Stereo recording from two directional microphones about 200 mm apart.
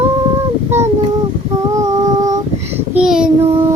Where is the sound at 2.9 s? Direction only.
5° right (ahead or behind).